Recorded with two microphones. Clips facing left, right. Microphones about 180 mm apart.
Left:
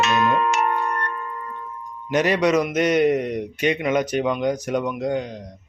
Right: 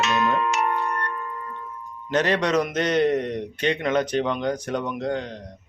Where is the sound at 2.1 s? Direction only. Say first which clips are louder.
Left 3 dB; 10° left (ahead or behind).